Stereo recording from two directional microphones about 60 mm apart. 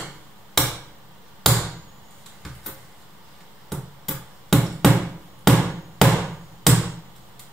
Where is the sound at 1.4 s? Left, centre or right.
Centre.